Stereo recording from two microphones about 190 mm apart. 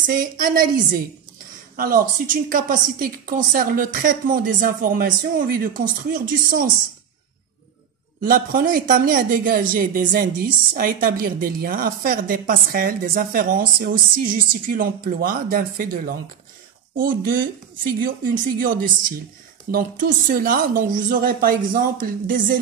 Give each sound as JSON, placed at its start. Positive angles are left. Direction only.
{"t": 0.0, "sound": "speech", "side_deg": -45}
{"t": 8.2, "sound": "speech", "side_deg": -50}